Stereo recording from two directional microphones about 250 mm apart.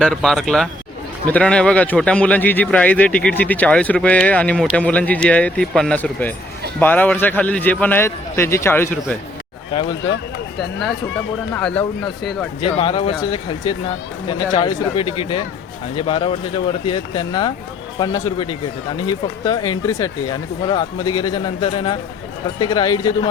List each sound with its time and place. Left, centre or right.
0.0 s a man's voice: centre
11.5 s speech: centre
12.6 s a man's voice: left